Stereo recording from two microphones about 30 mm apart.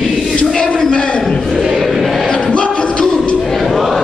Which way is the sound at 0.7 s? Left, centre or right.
Left.